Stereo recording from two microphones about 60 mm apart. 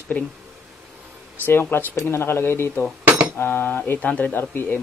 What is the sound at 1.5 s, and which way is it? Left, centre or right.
Speech, left.